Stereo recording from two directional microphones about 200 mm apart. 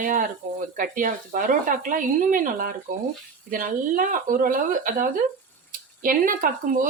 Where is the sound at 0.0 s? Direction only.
40° right (ahead or behind).